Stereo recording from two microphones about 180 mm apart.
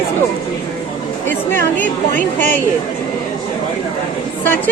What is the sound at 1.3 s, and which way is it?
Speech, 10° left (ahead or behind).